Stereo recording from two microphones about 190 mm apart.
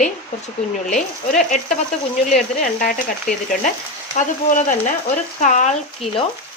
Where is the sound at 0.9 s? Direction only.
40° left (ahead or behind).